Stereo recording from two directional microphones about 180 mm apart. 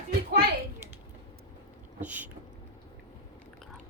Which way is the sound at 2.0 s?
10° right (ahead or behind).